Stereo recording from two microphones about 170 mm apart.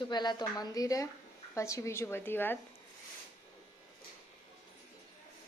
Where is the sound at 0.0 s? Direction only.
25° left (ahead or behind).